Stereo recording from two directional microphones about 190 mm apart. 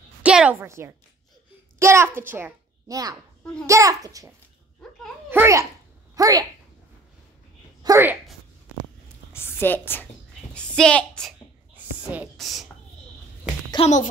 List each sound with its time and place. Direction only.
0.2 s a woman's voice: 5° right (ahead or behind)
4.8 s a sound: centre (ahead or behind)
5.3 s a child's voice: 15° right (ahead or behind)
7.8 s a sound: 15° right (ahead or behind)
9.3 s a woman's voice: 10° left (ahead or behind)
11.7 s whispering: 10° right (ahead or behind)
13.7 s a child's voice: 35° left (ahead or behind)